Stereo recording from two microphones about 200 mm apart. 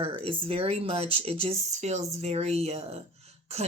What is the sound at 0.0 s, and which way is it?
Speech, 30° right (ahead or behind).